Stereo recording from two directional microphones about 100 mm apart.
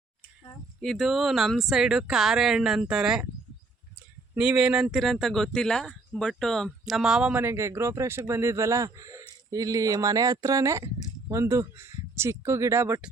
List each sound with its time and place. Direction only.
0.8 s speech: centre (ahead or behind)
4.4 s speech: 10° right (ahead or behind)
7.4 s speech: 25° right (ahead or behind)